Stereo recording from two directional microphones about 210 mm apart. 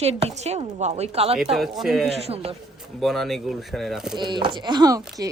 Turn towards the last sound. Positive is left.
turn(degrees=-15)  # may be behind; listen again after turning